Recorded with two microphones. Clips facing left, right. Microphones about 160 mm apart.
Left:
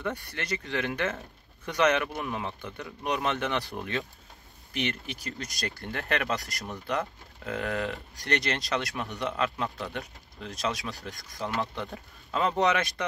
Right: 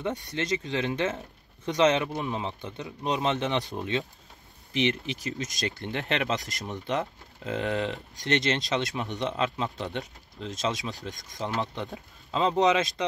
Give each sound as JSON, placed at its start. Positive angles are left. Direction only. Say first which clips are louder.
{"t": 0.0, "sound": "speech", "louder": "right 3 dB", "side_deg": -20}